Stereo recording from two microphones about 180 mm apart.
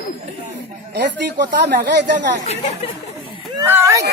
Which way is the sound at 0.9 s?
75° right (ahead or behind).